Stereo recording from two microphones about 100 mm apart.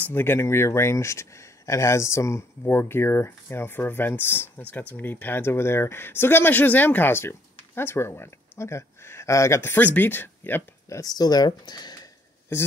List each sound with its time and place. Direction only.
0.0 s speech: 20° left (ahead or behind)
11.0 s speech: 40° left (ahead or behind)
12.5 s speech: 25° left (ahead or behind)